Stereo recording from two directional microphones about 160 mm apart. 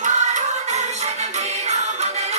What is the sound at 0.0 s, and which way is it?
Music, 45° right (ahead or behind).